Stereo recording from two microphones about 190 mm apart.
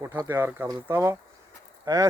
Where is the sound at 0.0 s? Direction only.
10° right (ahead or behind).